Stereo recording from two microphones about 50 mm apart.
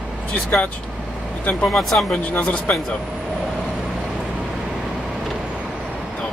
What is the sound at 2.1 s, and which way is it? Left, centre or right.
Speech, left.